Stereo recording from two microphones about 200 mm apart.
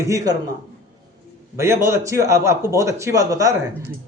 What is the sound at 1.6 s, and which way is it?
Speech, 15° right (ahead or behind).